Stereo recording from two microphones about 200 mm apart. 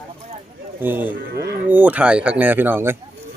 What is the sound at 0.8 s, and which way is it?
Speech, 10° right (ahead or behind).